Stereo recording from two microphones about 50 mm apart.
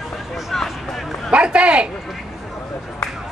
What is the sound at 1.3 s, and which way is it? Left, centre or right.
Speech, right.